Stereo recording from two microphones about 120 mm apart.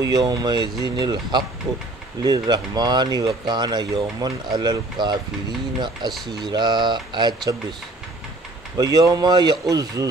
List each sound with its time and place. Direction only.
0.0 s speech: 35° right (ahead or behind)
8.7 s speech: 30° right (ahead or behind)